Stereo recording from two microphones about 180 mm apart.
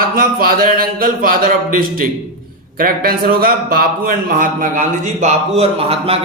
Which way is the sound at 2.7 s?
55° right (ahead or behind).